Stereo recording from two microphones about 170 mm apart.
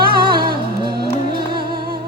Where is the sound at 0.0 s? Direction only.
60° right (ahead or behind).